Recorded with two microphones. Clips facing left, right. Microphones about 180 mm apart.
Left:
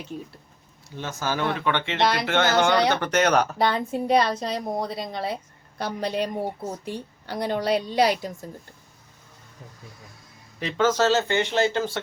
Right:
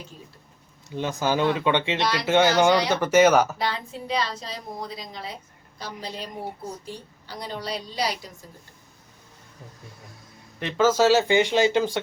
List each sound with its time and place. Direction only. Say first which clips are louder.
0.9 s speech: right 4 dB; 15° right (ahead or behind)
2.0 s a woman's voice: left 3 dB; 55° left (ahead or behind)
2.2 s speech: right 7 dB; 10° right (ahead or behind)
3.6 s a woman's voice: left 6 dB; 55° left (ahead or behind)
10.6 s speech: right 2 dB; 5° right (ahead or behind)